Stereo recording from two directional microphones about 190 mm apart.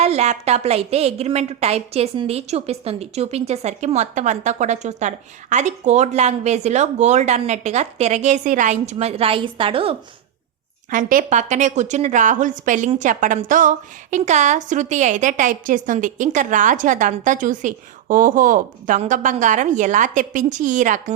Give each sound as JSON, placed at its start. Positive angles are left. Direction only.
{"t": 0.0, "sound": "speech", "side_deg": -35}
{"t": 10.9, "sound": "speech", "side_deg": -45}